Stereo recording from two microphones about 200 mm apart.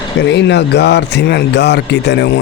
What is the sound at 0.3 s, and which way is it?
Speech, 60° left (ahead or behind).